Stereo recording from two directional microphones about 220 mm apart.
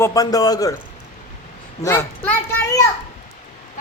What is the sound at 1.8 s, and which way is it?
A man's voice, 10° left (ahead or behind).